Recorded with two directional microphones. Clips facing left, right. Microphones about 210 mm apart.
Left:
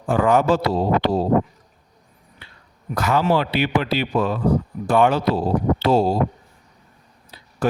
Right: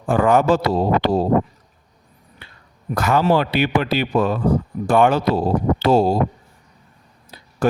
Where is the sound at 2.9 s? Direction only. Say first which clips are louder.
Right 2 dB; 50° right (ahead or behind).